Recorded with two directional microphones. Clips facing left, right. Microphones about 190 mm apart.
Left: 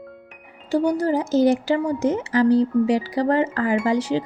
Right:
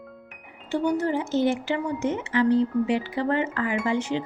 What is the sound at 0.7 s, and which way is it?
A woman's voice, 35° left (ahead or behind).